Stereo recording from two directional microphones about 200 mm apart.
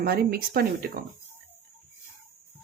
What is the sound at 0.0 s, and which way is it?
Speech, 45° right (ahead or behind).